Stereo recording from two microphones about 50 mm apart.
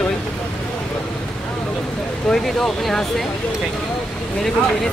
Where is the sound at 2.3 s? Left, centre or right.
Centre.